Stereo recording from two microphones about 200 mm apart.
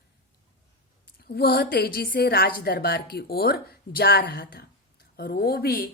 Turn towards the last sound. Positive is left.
turn(degrees=50)  # may be behind; listen again after turning